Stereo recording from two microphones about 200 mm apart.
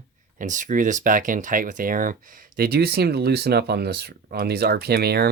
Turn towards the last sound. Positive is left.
turn(degrees=-50)  # may be behind; listen again after turning